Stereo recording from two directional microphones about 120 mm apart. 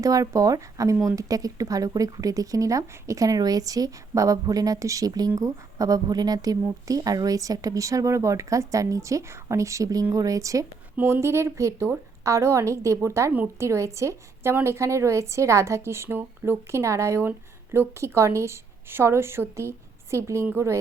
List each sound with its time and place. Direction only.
0.0 s speech: 30° right (ahead or behind)
13.3 s speech: 15° right (ahead or behind)
13.7 s speech: 25° right (ahead or behind)